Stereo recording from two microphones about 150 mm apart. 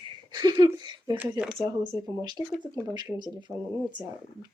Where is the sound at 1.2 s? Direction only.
5° right (ahead or behind).